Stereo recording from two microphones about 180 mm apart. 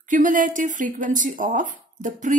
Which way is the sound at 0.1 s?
45° right (ahead or behind).